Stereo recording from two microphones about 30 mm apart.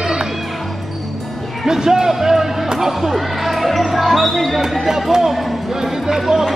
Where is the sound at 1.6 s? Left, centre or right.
Centre.